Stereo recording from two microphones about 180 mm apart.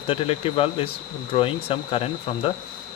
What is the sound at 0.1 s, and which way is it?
Speech, 30° left (ahead or behind).